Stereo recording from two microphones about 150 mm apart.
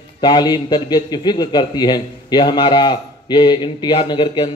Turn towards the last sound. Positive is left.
turn(degrees=30)  # may be behind; listen again after turning